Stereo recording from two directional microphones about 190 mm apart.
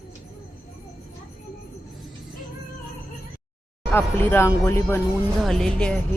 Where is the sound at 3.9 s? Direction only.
10° left (ahead or behind).